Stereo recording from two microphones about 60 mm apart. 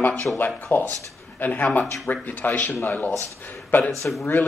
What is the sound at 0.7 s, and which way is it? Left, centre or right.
Speech, left.